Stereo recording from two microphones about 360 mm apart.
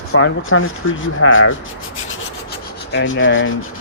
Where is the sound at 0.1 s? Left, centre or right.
Left.